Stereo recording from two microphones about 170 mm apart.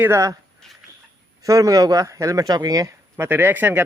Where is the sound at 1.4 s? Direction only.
20° right (ahead or behind).